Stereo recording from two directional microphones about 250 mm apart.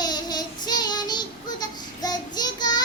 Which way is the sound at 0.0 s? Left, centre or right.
Centre.